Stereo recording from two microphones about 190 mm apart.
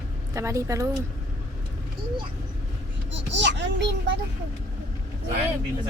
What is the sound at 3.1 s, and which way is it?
A child's voice, 70° right (ahead or behind).